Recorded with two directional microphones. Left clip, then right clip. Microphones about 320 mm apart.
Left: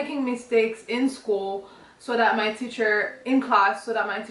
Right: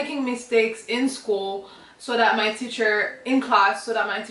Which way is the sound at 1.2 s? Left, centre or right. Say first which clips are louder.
Right 1 dB; left.